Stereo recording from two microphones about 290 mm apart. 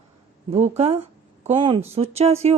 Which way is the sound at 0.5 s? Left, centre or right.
Right.